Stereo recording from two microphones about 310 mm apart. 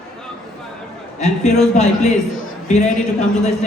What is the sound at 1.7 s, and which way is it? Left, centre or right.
Speech, left.